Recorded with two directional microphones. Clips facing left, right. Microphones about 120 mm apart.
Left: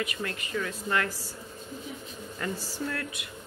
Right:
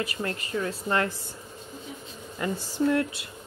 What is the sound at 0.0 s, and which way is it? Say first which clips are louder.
Speech: right 2 dB; 30° right (ahead or behind).